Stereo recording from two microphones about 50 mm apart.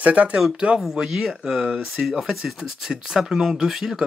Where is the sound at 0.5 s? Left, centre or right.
Right.